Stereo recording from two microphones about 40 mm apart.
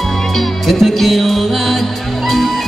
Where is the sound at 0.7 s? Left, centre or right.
Centre.